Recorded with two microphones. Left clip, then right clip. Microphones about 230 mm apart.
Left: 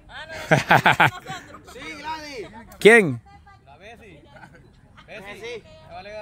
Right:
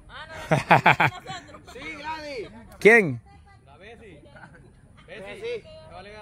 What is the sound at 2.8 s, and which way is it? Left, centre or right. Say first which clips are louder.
Speech: left 3 dB; centre.